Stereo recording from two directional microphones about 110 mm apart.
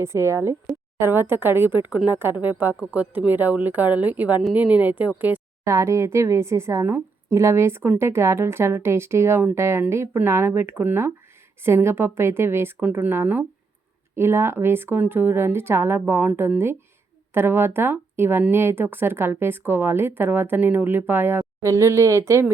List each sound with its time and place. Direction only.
0.0 s a woman's voice: 25° right (ahead or behind)